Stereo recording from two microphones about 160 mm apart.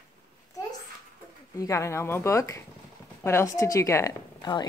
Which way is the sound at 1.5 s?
20° left (ahead or behind).